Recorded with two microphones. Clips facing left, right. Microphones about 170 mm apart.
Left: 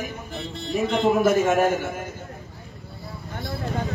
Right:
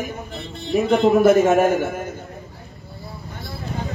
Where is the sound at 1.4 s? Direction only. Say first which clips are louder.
Right 4 dB; 45° right (ahead or behind).